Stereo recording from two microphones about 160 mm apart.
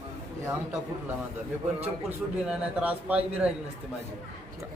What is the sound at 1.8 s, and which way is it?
A man's voice, 5° right (ahead or behind).